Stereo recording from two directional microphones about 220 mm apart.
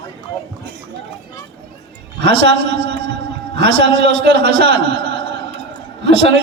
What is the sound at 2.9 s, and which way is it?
A man's voice, 50° right (ahead or behind).